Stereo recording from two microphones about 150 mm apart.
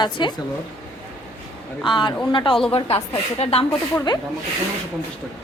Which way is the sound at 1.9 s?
35° left (ahead or behind).